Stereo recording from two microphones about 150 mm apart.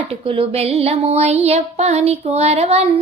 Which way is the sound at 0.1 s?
40° right (ahead or behind).